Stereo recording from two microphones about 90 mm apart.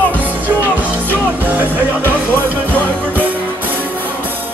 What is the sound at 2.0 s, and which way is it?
Music, 20° left (ahead or behind).